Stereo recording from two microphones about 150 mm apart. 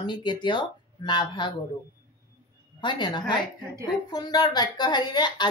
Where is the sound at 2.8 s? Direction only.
30° left (ahead or behind).